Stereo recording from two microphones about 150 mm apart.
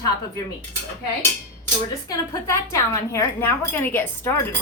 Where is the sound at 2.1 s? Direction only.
20° left (ahead or behind).